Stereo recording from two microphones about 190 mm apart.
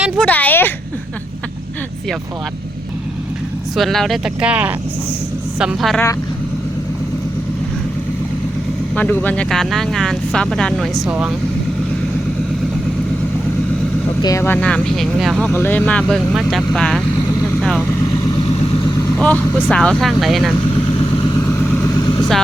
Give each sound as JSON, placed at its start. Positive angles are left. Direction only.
{"t": 0.2, "sound": "speech", "side_deg": 10}
{"t": 3.8, "sound": "speech", "side_deg": 0}
{"t": 9.0, "sound": "speech", "side_deg": 10}
{"t": 14.2, "sound": "speech", "side_deg": 15}
{"t": 17.4, "sound": "vehicle", "side_deg": 5}
{"t": 18.0, "sound": "vehicle", "side_deg": 20}
{"t": 19.1, "sound": "speech", "side_deg": 10}
{"t": 20.7, "sound": "vehicle", "side_deg": 30}
{"t": 21.6, "sound": "vehicle", "side_deg": 10}